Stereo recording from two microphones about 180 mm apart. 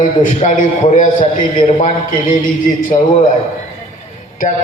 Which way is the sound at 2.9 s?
35° left (ahead or behind).